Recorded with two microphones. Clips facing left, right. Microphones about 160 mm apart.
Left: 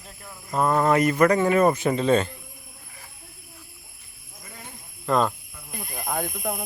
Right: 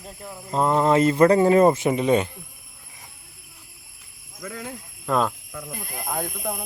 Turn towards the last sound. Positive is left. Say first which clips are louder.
# even
turn(degrees=0)  # may be behind; listen again after turning